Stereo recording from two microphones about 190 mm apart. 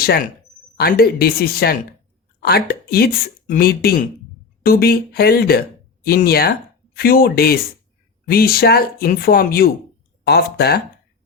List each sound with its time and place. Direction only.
0.0 s speech: 55° left (ahead or behind)